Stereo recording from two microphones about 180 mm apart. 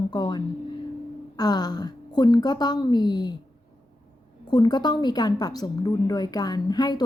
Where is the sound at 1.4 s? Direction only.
20° left (ahead or behind).